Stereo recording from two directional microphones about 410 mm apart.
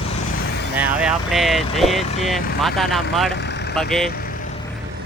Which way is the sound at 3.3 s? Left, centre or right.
Left.